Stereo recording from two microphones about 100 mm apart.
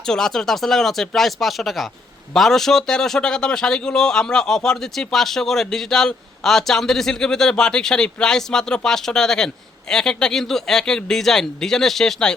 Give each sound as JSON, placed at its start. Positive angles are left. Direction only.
{"t": 0.0, "sound": "a man's voice", "side_deg": 5}